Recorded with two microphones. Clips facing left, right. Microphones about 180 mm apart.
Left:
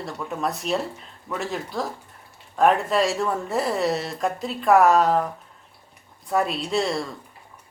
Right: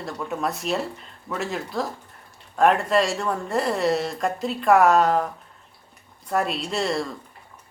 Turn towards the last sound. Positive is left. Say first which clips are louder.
# left 1 dB
turn(degrees=0)  # may be behind; listen again after turning